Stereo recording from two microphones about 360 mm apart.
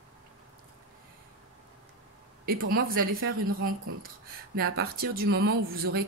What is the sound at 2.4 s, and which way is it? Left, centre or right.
Speech, right.